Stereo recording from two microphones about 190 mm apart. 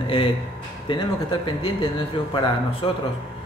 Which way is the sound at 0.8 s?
25° left (ahead or behind).